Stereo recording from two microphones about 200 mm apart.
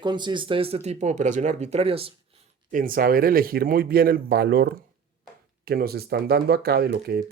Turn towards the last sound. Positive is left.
turn(degrees=-50)  # may be behind; listen again after turning